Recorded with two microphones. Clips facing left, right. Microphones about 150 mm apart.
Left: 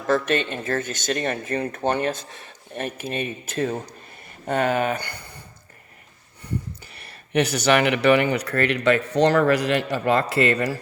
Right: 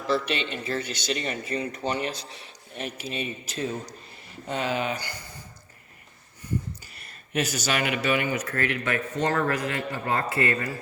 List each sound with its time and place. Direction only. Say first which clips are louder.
0.1 s speech: left 5 dB; 50° left (ahead or behind)
6.4 s speech: left 1 dB; 65° left (ahead or behind); by 10.8 s 85° left